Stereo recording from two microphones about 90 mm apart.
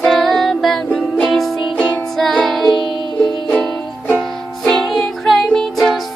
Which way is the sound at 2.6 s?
55° left (ahead or behind).